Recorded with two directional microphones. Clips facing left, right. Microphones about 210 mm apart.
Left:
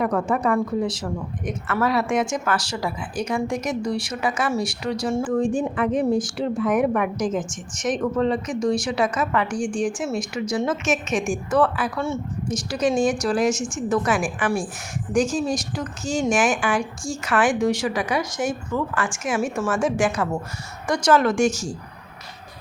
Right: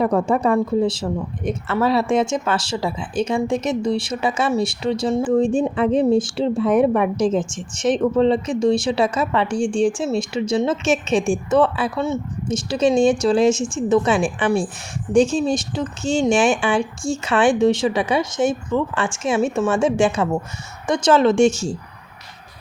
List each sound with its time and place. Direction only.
0.0 s speech: 30° right (ahead or behind)